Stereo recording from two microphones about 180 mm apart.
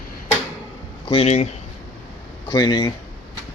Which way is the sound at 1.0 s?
35° left (ahead or behind).